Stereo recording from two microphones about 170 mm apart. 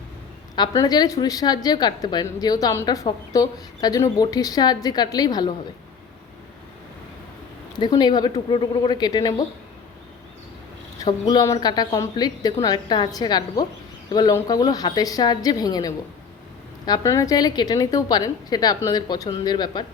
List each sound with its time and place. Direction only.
0.5 s a woman's voice: 25° left (ahead or behind)
7.8 s a woman's voice: 25° left (ahead or behind)
11.0 s a woman's voice: 20° left (ahead or behind)